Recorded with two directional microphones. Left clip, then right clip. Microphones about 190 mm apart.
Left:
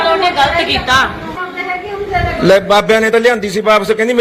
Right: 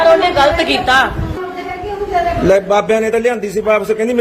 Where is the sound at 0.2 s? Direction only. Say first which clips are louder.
Even; 60° right (ahead or behind).